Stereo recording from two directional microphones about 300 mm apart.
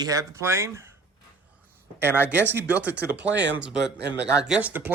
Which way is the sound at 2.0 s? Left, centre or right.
Centre.